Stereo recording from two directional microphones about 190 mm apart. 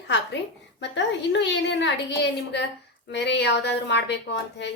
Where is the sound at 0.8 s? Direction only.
70° left (ahead or behind).